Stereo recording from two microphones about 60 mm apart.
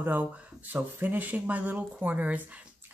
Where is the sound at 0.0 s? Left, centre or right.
Right.